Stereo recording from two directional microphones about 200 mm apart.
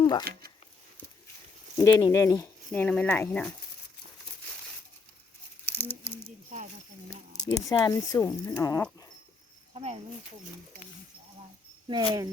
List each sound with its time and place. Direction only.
0.0 s a sound: 20° left (ahead or behind)
1.8 s speech: 15° left (ahead or behind)
5.6 s a sound: 10° left (ahead or behind)
7.5 s speech: 15° left (ahead or behind)
9.7 s speech: 30° right (ahead or behind)
11.9 s speech: 20° right (ahead or behind)